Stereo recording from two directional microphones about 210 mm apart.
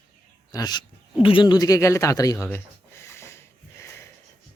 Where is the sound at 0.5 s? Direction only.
20° left (ahead or behind).